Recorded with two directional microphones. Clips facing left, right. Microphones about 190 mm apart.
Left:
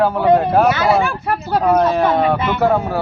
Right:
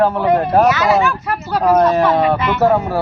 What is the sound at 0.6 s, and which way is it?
Speech, 30° left (ahead or behind).